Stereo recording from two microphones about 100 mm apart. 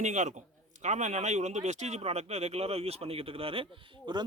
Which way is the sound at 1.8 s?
90° right.